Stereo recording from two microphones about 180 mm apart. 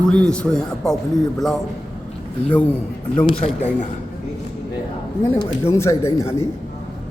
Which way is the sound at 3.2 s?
35° left (ahead or behind).